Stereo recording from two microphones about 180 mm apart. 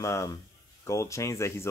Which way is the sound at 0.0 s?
15° left (ahead or behind).